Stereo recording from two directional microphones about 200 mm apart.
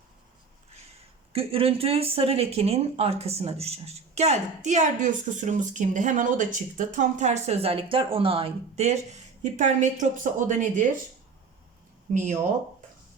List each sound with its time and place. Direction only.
1.3 s speech: 30° right (ahead or behind)
12.1 s speech: 40° right (ahead or behind)